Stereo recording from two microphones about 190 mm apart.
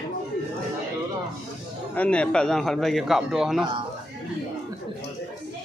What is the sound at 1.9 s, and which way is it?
A man's voice, 5° left (ahead or behind).